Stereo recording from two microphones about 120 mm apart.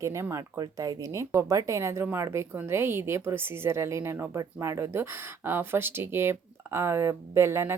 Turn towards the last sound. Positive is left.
turn(degrees=-20)  # may be behind; listen again after turning